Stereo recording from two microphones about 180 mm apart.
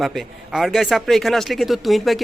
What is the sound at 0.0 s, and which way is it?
Speech, centre (ahead or behind).